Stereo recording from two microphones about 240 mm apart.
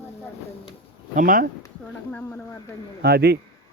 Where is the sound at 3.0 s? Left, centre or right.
Right.